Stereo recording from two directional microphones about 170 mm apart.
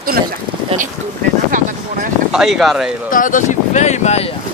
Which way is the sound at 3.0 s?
50° left (ahead or behind).